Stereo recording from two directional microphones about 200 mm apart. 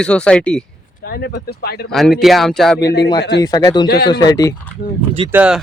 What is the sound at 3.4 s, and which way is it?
Speech, 15° left (ahead or behind).